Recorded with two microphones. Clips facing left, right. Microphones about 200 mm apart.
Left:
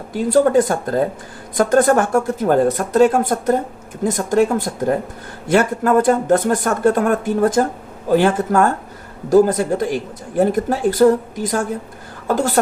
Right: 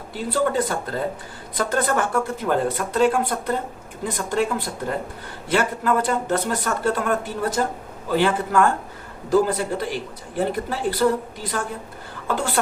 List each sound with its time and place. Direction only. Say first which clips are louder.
0.1 s speech: left 9 dB; 45° left (ahead or behind)